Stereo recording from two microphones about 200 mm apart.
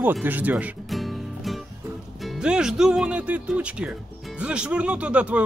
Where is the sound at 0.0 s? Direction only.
10° right (ahead or behind).